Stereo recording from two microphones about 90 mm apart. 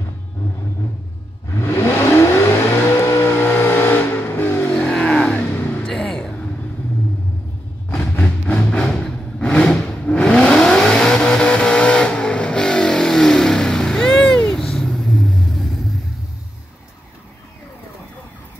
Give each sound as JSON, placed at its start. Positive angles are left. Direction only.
{"t": 1.5, "sound": "vehicle", "side_deg": 25}
{"t": 4.7, "sound": "vehicle", "side_deg": 10}
{"t": 5.9, "sound": "music", "side_deg": 5}
{"t": 8.1, "sound": "vehicle", "side_deg": 15}